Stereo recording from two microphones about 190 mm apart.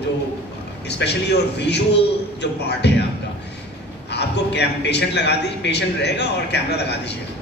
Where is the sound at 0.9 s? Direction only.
60° left (ahead or behind).